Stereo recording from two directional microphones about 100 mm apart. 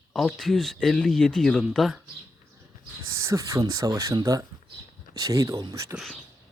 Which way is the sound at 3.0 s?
30° right (ahead or behind).